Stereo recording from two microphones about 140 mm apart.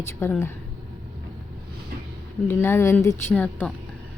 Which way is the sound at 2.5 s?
15° left (ahead or behind).